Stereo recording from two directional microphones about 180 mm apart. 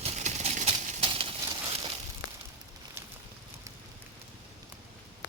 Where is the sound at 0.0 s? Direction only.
40° right (ahead or behind).